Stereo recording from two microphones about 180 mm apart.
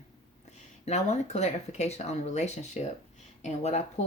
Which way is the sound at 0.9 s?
35° left (ahead or behind).